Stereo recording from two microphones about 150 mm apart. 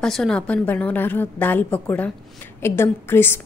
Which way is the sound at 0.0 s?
5° left (ahead or behind).